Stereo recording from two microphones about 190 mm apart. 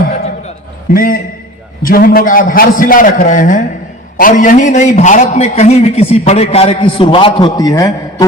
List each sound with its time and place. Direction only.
0.9 s a man's voice: 50° left (ahead or behind); by 8.3 s 20° left (ahead or behind)